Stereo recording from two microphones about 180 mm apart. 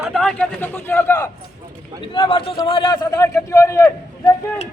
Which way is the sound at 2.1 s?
30° left (ahead or behind).